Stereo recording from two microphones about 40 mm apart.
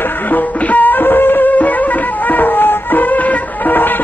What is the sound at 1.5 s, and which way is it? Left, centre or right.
Music, left.